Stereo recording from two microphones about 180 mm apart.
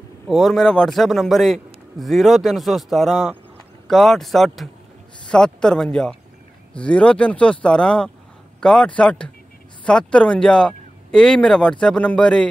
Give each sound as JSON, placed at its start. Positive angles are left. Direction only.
{"t": 0.3, "sound": "a man's voice", "side_deg": 0}